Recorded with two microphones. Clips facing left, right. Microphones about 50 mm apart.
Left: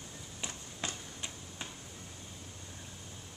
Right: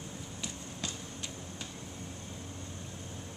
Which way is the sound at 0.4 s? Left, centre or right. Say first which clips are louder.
Left 1 dB; left.